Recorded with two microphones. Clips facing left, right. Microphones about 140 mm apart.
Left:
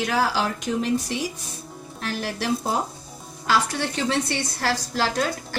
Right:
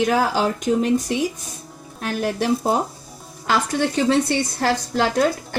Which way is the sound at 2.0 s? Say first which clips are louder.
Right 6 dB; 50° right (ahead or behind).